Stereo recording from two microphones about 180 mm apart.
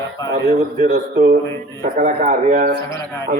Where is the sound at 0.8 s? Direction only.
50° right (ahead or behind).